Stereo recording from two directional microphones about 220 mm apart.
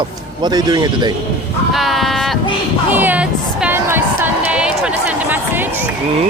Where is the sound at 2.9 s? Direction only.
10° right (ahead or behind).